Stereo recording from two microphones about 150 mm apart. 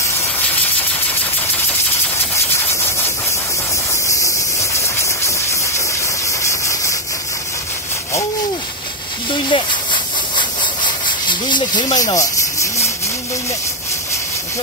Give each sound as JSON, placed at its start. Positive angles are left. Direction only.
{"t": 4.1, "sound": "steam", "side_deg": 20}
{"t": 6.2, "sound": "engine", "side_deg": 20}
{"t": 9.5, "sound": "speech", "side_deg": 35}
{"t": 11.2, "sound": "rub", "side_deg": 30}